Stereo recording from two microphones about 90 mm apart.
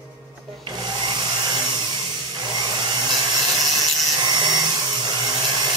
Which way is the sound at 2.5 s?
55° right (ahead or behind).